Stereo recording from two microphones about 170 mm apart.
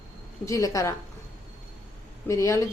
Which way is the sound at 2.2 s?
20° left (ahead or behind).